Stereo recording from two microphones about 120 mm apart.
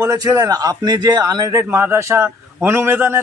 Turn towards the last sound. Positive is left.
turn(degrees=-20)  # may be behind; listen again after turning